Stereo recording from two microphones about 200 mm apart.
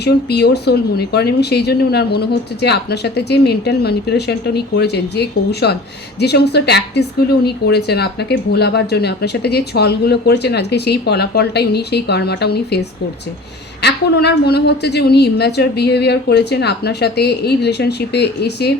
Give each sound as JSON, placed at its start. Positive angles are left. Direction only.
{"t": 0.0, "sound": "a woman's voice", "side_deg": 55}
{"t": 13.8, "sound": "a woman's voice", "side_deg": 55}